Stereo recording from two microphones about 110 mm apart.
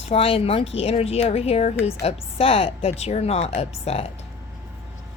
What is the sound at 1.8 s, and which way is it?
Speech, 65° left (ahead or behind).